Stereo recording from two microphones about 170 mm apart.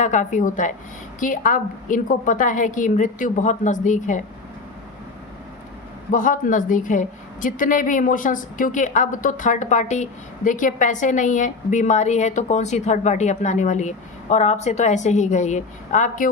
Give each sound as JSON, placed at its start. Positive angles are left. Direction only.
{"t": 0.0, "sound": "a woman's voice", "side_deg": 45}
{"t": 6.1, "sound": "a woman's voice", "side_deg": 50}